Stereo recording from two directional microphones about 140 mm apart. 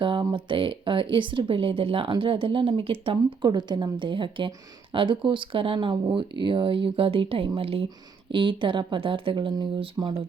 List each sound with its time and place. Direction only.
0.0 s speech: 35° right (ahead or behind)